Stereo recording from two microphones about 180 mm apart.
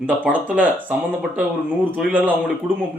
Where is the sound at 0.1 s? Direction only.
10° right (ahead or behind).